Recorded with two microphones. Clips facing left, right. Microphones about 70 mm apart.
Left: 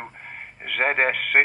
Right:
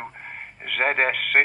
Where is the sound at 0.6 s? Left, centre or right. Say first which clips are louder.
Even; centre.